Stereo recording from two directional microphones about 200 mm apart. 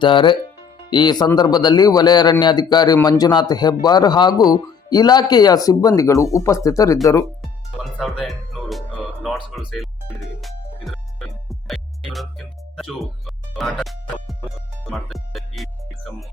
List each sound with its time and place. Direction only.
0.0 s a man's voice: 25° left (ahead or behind)
7.9 s speech: centre (ahead or behind)
11.4 s music: centre (ahead or behind)
14.8 s speech: centre (ahead or behind)